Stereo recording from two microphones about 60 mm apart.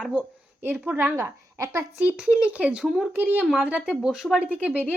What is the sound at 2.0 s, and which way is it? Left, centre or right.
Speech, centre.